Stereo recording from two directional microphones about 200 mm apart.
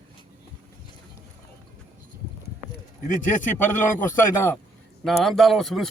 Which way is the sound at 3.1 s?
40° left (ahead or behind).